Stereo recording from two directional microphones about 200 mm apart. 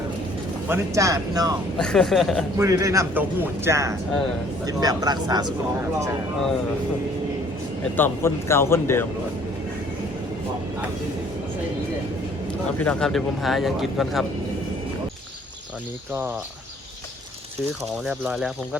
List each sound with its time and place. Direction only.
0.7 s a man's voice: 15° right (ahead or behind)
1.8 s speech: 5° left (ahead or behind)
2.6 s a man's voice: 15° right (ahead or behind)
7.9 s speech: 10° left (ahead or behind)
12.8 s speech: 5° left (ahead or behind)
17.7 s speech: 5° right (ahead or behind)